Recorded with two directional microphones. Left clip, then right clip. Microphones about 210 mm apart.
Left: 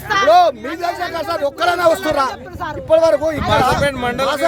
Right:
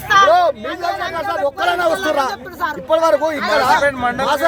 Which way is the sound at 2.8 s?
Centre (ahead or behind).